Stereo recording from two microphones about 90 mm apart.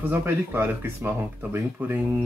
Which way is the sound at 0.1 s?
25° right (ahead or behind).